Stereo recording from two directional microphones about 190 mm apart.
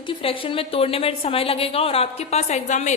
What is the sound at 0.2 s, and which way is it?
A woman's voice, 30° left (ahead or behind).